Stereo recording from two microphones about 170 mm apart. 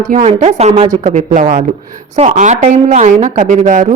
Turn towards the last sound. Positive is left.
turn(degrees=-50)  # may be behind; listen again after turning